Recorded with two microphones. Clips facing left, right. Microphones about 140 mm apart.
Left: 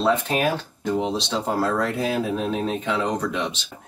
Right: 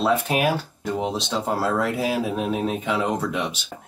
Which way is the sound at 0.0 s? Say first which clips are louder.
Even; 5° right (ahead or behind).